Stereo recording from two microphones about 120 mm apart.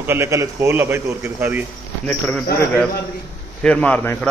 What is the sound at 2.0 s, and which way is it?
Speech, 5° left (ahead or behind).